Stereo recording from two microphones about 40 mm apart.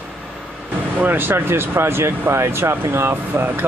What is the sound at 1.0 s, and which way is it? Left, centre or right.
Speech, right.